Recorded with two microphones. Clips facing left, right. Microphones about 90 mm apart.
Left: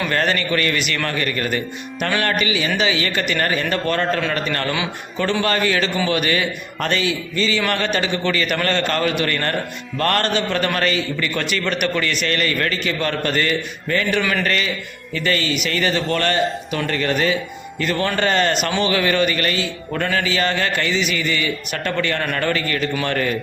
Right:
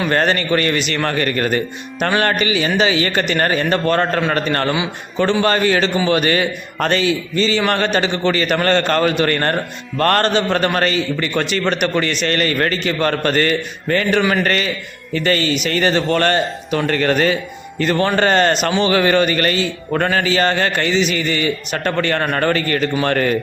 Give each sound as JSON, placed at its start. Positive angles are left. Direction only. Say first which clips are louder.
{"t": 0.1, "sound": "a man's voice", "louder": "right 5 dB", "side_deg": -35}
{"t": 1.1, "sound": "a man's voice", "louder": "right 4 dB", "side_deg": -45}
{"t": 14.2, "sound": "a man's voice", "louder": "right 4 dB", "side_deg": -30}
{"t": 14.4, "sound": "a man's voice", "louder": "right 3 dB", "side_deg": -45}
{"t": 17.7, "sound": "a man's voice", "louder": "right 5 dB", "side_deg": -35}
{"t": 18.5, "sound": "a man's voice", "louder": "right 4 dB", "side_deg": -30}
{"t": 20.9, "sound": "a man's voice", "louder": "right 4 dB", "side_deg": -30}